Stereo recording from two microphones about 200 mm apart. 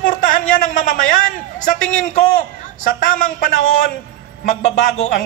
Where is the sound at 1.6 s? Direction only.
40° left (ahead or behind).